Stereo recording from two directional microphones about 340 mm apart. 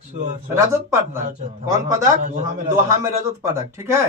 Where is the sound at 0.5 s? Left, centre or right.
Centre.